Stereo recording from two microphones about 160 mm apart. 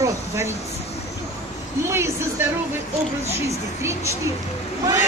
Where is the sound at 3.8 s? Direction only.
15° right (ahead or behind).